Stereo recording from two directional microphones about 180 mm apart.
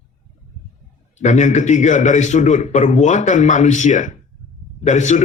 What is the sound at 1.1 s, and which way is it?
A man's voice, 40° left (ahead or behind).